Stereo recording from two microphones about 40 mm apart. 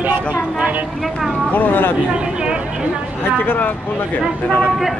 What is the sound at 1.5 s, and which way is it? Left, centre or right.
Speech, left.